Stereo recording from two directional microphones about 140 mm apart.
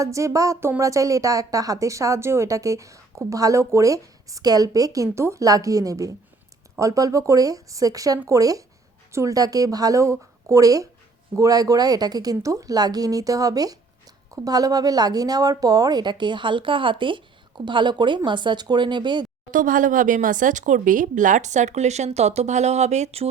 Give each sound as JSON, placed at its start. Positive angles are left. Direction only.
{"t": 0.0, "sound": "a woman's voice", "side_deg": -20}
{"t": 19.5, "sound": "speech", "side_deg": -70}